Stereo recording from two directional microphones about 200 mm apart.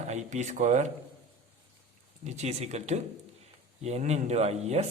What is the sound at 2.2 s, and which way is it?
Speech, 35° right (ahead or behind).